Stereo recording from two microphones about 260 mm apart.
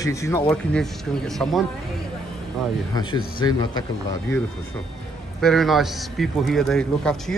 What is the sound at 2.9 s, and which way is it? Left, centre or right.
Speech, centre.